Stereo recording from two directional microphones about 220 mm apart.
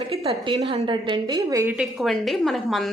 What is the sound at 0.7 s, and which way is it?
A woman's voice, 20° right (ahead or behind).